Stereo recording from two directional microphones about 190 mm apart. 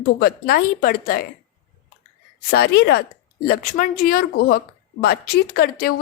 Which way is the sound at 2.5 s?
60° left (ahead or behind).